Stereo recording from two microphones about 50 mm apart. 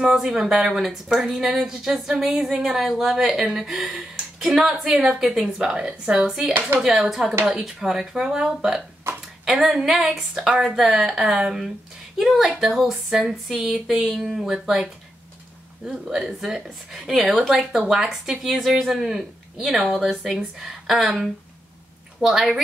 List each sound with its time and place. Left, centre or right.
0.0 s speech: centre
2.0 s speech: centre
2.2 s speech: centre
15.9 s speech: centre